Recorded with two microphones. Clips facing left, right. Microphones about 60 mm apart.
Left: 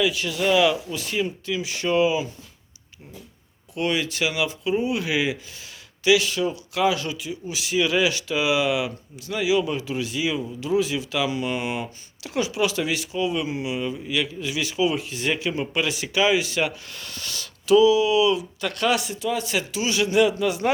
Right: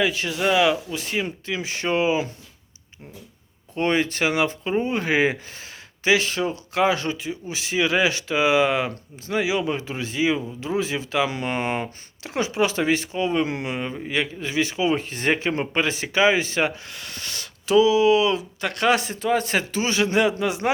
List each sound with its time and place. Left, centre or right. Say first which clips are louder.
0.0 s speech: even; right
3.8 s speech: right 3 dB; right